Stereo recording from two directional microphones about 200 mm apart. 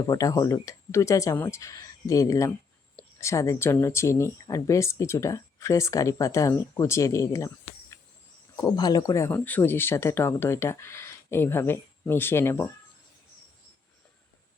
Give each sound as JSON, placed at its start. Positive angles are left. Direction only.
{"t": 0.0, "sound": "speech", "side_deg": 20}